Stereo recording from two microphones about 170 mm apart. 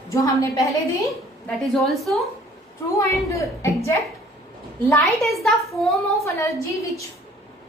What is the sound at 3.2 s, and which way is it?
Speech, 15° left (ahead or behind).